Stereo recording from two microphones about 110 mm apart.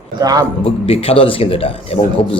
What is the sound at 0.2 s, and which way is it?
Speech, 35° right (ahead or behind).